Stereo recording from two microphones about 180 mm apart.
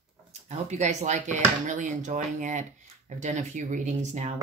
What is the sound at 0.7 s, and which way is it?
Speech, 40° right (ahead or behind).